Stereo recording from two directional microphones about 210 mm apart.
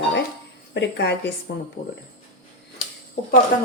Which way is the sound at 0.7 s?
55° left (ahead or behind).